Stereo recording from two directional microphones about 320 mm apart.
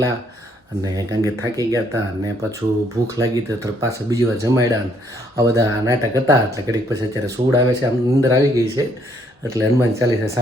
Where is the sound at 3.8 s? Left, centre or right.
Centre.